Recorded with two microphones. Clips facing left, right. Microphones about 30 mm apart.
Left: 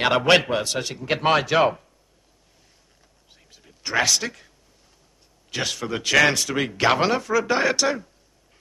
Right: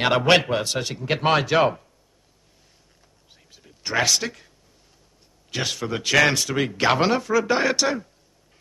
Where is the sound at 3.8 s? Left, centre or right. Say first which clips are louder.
Even; centre.